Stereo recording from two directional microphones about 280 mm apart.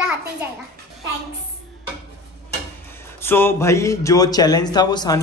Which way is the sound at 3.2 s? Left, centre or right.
Centre.